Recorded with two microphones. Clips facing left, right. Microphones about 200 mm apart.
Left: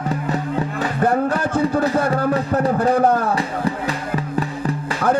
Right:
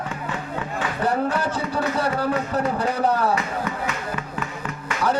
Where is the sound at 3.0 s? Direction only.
50° left (ahead or behind).